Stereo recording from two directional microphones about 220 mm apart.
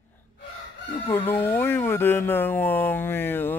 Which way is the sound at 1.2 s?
10° left (ahead or behind).